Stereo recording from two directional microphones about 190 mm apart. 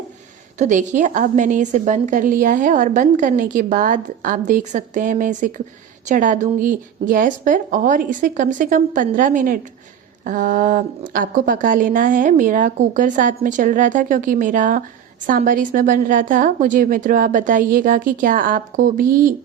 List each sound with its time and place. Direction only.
0.6 s a woman's voice: 40° right (ahead or behind)